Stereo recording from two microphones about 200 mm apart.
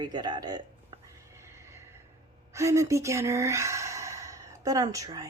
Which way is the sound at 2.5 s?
15° right (ahead or behind).